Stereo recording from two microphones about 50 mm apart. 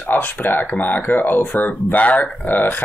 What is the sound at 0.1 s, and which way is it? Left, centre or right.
Speech, left.